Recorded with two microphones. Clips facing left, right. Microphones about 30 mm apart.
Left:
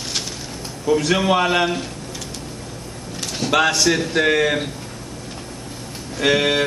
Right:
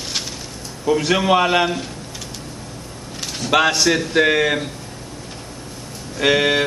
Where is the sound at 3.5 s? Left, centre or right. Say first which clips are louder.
Right 1 dB; centre.